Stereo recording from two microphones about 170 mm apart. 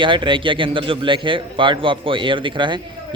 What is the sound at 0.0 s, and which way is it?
A man's voice, 30° right (ahead or behind).